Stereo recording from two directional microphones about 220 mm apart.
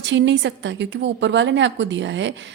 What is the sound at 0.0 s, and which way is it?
A woman's voice, 55° right (ahead or behind).